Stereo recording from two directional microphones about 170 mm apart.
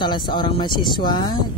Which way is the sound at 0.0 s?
25° left (ahead or behind).